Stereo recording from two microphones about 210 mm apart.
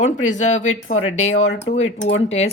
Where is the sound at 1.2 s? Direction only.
30° left (ahead or behind).